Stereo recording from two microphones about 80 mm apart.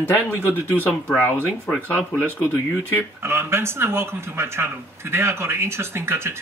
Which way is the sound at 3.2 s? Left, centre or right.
Right.